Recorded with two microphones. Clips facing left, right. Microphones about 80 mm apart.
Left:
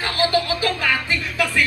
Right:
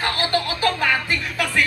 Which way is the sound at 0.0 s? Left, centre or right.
Right.